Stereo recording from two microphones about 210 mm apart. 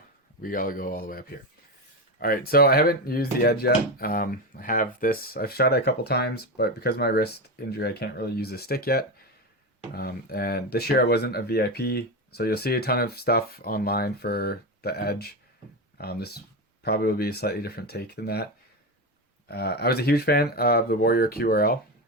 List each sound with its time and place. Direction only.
0.4 s speech: 40° left (ahead or behind)
19.5 s speech: 50° left (ahead or behind)